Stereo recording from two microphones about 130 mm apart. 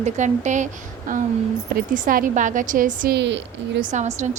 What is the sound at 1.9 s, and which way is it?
A woman's voice, 90° right.